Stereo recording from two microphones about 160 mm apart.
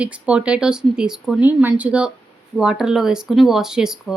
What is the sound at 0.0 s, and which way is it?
Speech, 5° right (ahead or behind).